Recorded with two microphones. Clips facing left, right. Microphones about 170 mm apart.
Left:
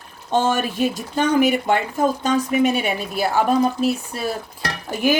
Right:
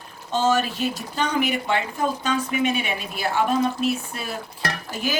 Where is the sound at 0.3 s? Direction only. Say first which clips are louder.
Left 2 dB; 55° left (ahead or behind); by 3.9 s 40° left (ahead or behind).